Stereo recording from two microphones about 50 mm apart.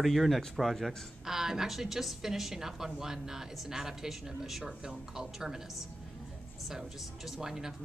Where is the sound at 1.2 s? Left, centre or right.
Centre.